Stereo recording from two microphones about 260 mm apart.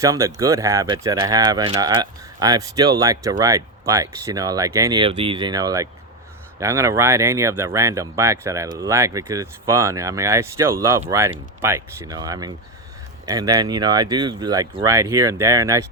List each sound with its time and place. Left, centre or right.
0.0 s speech: centre